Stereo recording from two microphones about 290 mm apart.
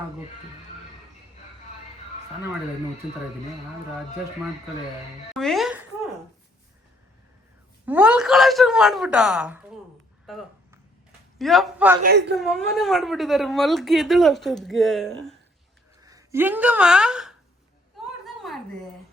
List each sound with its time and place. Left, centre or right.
5.3 s music: centre
7.9 s wail: centre
10.2 s a sound: centre
11.3 s a woman's voice: centre
12.0 s a woman's voice: right
12.4 s a woman's voice: centre
16.0 s a woman's voice: centre